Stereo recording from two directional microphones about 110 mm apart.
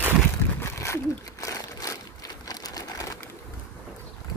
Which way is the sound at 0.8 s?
25° left (ahead or behind).